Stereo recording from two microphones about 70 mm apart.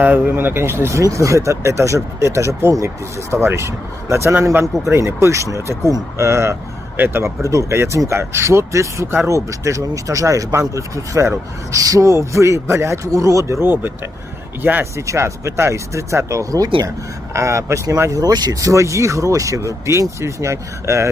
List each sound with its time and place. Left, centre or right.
0.0 s speech: right
14.9 s speech: right
17.3 s speech: right
18.2 s speech: right
18.6 s speech: right